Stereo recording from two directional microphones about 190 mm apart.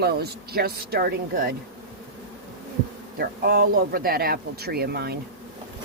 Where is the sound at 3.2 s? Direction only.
50° right (ahead or behind).